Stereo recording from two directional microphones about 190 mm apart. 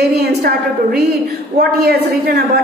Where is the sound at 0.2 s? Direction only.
60° right (ahead or behind).